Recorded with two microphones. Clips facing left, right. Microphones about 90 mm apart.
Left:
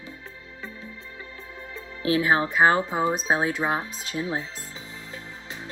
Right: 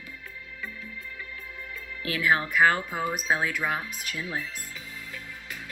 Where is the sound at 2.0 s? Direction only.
25° left (ahead or behind).